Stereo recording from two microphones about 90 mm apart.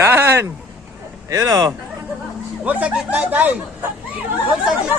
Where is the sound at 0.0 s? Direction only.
25° right (ahead or behind).